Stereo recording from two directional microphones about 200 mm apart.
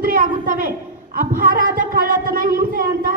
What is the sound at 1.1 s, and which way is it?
A woman's voice, 45° right (ahead or behind).